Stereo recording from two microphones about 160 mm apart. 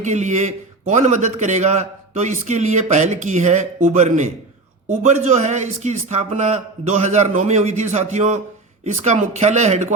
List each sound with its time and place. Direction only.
0.0 s a man's voice: 45° right (ahead or behind)